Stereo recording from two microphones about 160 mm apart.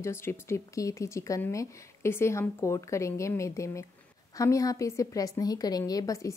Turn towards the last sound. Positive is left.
turn(degrees=20)  # may be behind; listen again after turning